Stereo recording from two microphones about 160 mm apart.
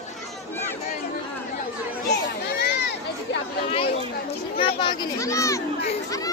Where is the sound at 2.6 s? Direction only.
90° left.